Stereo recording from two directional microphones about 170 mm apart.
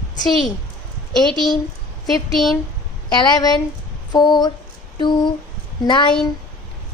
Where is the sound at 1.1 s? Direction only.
Centre (ahead or behind).